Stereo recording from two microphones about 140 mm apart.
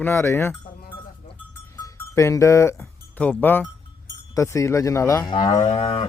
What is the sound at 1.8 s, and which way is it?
Speech, 25° left (ahead or behind).